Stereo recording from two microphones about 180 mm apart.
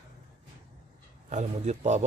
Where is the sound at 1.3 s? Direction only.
40° right (ahead or behind).